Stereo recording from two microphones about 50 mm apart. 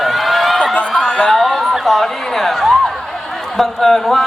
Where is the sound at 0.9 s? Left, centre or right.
Left.